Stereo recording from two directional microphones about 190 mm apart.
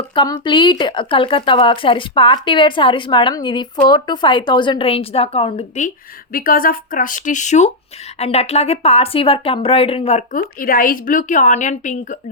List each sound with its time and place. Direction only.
0.1 s a woman's voice: 25° left (ahead or behind)
6.3 s speech: 50° left (ahead or behind)